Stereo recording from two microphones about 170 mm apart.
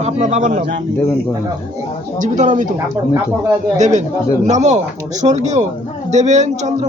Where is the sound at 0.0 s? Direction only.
40° right (ahead or behind).